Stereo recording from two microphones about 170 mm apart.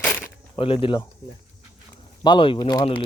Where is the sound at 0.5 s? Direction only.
30° left (ahead or behind).